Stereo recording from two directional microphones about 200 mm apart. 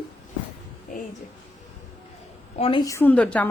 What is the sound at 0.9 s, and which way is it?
Speech, 40° left (ahead or behind).